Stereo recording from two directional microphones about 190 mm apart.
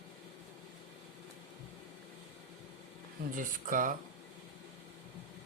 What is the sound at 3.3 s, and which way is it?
Speech, 45° right (ahead or behind).